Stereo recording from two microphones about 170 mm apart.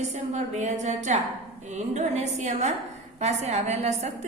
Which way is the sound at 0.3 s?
40° right (ahead or behind).